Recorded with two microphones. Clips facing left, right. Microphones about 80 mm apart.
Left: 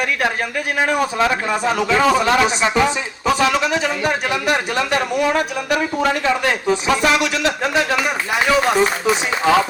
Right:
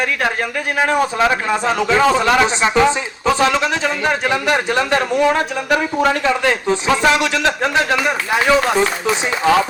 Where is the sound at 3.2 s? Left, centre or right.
Right.